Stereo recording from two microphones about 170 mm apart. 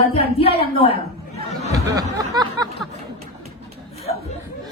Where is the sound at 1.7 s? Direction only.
20° right (ahead or behind).